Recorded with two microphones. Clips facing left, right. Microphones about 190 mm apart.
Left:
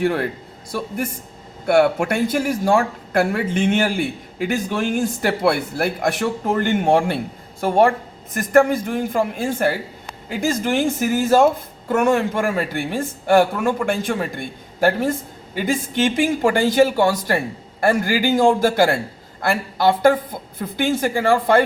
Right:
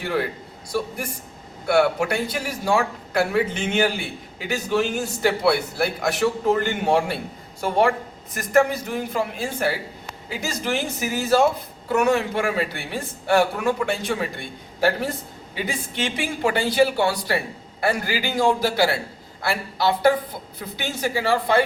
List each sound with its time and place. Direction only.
1.6 s speech: 50° left (ahead or behind)